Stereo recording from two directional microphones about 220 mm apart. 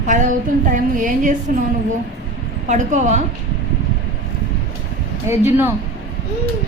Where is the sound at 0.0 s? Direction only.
35° right (ahead or behind).